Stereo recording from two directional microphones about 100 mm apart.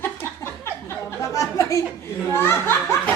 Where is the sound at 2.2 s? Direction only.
25° left (ahead or behind).